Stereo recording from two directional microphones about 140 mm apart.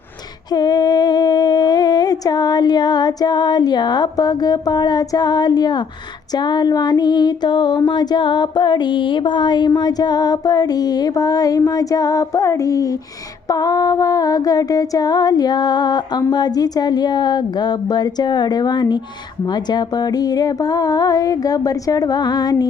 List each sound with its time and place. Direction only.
0.5 s a sound: 30° left (ahead or behind)
6.3 s speech: 30° left (ahead or behind)
7.9 s music: 30° left (ahead or behind)
16.3 s speech: 30° left (ahead or behind)
19.5 s music: 30° left (ahead or behind)